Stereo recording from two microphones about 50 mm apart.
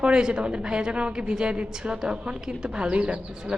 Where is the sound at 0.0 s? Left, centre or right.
Centre.